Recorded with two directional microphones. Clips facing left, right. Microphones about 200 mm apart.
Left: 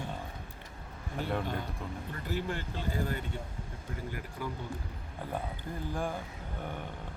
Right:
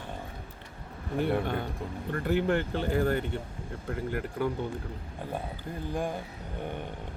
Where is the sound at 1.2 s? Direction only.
60° right (ahead or behind).